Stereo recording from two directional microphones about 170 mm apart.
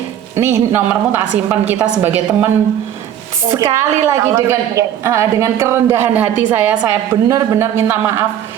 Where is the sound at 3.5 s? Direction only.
15° right (ahead or behind).